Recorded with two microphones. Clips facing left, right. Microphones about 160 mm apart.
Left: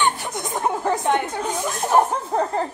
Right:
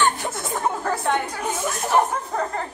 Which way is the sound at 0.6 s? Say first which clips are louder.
Left 3 dB; 20° left (ahead or behind).